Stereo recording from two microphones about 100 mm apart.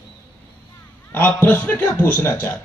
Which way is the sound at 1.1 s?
20° left (ahead or behind).